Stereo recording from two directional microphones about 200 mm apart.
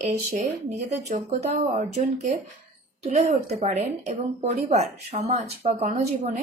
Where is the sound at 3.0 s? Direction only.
35° right (ahead or behind).